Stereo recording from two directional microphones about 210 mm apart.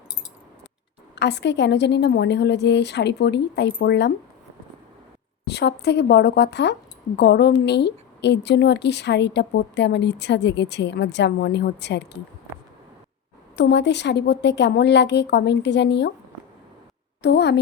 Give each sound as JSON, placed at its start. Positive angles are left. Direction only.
{"t": 1.1, "sound": "a woman's voice", "side_deg": 55}
{"t": 5.5, "sound": "a woman's voice", "side_deg": 55}
{"t": 13.6, "sound": "a woman's voice", "side_deg": 55}
{"t": 17.2, "sound": "a woman's voice", "side_deg": 55}